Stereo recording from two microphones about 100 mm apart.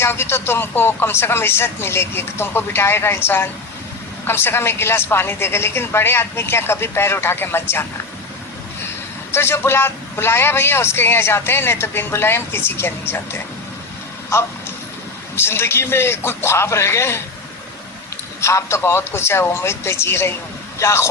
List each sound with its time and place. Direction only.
0.0 s a man's voice: 25° left (ahead or behind)
9.3 s a man's voice: 25° left (ahead or behind)
15.4 s a man's voice: 25° left (ahead or behind)
18.3 s a man's voice: 30° left (ahead or behind)